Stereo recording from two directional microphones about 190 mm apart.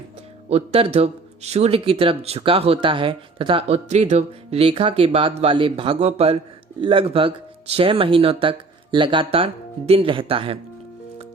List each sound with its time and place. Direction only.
0.5 s a man's voice: 35° right (ahead or behind)